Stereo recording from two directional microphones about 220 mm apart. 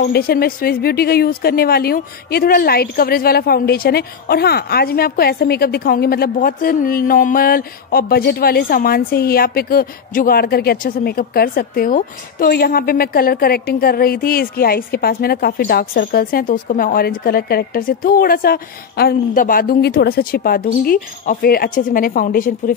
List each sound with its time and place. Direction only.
0.0 s a woman's voice: 45° left (ahead or behind)